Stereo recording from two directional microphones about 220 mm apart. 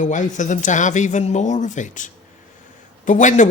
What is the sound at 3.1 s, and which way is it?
Speech, 35° left (ahead or behind).